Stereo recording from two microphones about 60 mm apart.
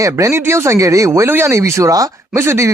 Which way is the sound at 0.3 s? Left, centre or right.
Right.